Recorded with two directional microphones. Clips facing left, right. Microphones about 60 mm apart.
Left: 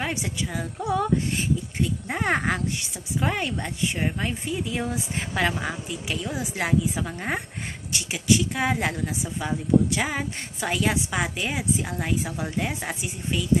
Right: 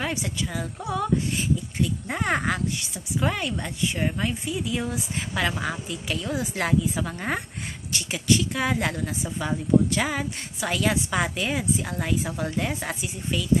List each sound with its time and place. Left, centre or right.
0.0 s a woman's voice: left
0.9 s female singing: left
2.0 s a woman's voice: left
4.4 s speech: left
5.6 s a woman's voice: centre
7.9 s a woman's voice: left
11.1 s a woman's voice: centre